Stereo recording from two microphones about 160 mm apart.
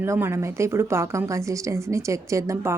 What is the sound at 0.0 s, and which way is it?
Speech, 15° right (ahead or behind).